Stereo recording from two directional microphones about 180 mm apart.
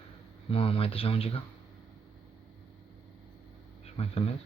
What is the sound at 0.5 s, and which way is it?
Speech, 30° left (ahead or behind).